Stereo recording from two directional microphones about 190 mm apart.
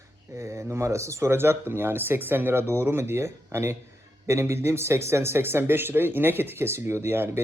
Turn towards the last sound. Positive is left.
turn(degrees=-10)  # may be behind; listen again after turning